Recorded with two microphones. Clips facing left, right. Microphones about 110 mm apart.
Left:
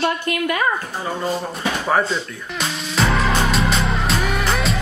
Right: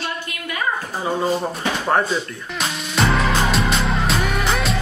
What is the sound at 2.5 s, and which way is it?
Music, centre (ahead or behind).